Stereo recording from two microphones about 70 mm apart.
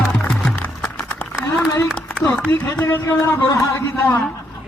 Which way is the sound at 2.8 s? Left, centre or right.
Left.